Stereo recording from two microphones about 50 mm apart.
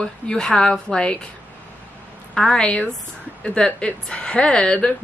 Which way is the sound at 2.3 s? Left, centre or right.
Centre.